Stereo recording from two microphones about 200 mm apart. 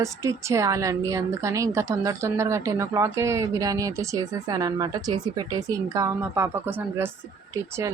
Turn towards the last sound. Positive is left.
turn(degrees=-15)  # may be behind; listen again after turning